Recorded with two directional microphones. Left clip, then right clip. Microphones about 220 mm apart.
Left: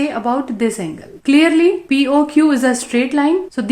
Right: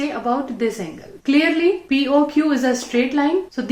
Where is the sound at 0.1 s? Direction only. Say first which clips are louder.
Left 3 dB; 45° left (ahead or behind).